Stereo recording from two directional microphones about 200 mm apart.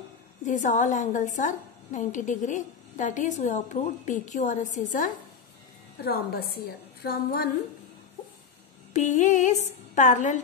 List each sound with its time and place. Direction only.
0.5 s a woman's voice: 40° left (ahead or behind)
6.0 s a woman's voice: 50° left (ahead or behind)
8.9 s a woman's voice: 35° left (ahead or behind)